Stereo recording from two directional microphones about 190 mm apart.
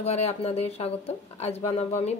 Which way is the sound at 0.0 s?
35° left (ahead or behind).